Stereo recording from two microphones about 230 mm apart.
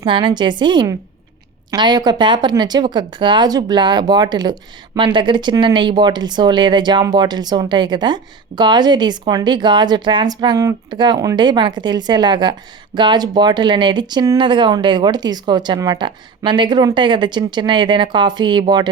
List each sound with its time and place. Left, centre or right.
0.0 s speech: right